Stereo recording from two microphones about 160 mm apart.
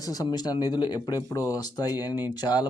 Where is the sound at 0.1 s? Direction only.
25° left (ahead or behind).